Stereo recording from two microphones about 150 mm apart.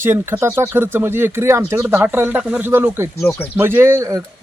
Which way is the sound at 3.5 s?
15° right (ahead or behind).